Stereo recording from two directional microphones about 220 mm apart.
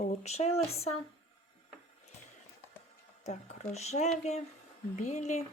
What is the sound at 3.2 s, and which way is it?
Speech, 30° left (ahead or behind).